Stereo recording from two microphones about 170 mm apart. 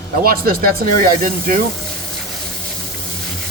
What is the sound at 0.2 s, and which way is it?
Speech, 60° right (ahead or behind).